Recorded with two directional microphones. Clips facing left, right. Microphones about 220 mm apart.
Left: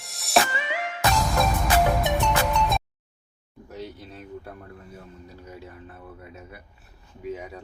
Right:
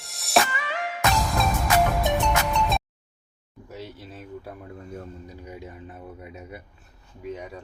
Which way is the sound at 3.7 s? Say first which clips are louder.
Left 1 dB; 5° right (ahead or behind).